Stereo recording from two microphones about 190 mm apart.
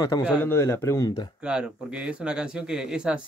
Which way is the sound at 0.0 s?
15° left (ahead or behind).